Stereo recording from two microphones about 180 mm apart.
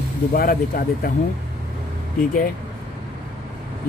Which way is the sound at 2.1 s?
55° left (ahead or behind).